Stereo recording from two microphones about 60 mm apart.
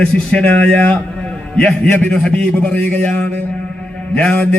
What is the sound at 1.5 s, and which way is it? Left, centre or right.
A man's voice, centre.